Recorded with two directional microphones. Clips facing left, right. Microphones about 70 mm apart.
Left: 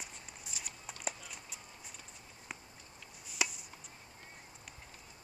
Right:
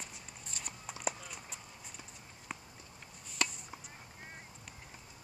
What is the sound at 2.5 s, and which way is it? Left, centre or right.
Run, centre.